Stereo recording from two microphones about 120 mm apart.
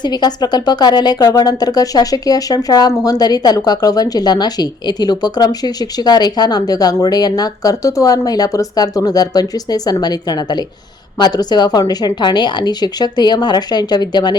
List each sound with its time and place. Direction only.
0.0 s a woman's voice: 35° left (ahead or behind)